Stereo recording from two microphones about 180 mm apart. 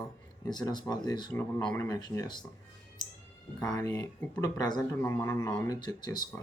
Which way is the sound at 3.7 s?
20° left (ahead or behind).